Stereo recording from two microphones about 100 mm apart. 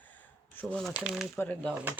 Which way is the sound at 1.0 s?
5° right (ahead or behind).